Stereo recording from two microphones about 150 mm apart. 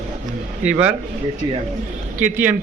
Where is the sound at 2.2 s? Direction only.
10° right (ahead or behind).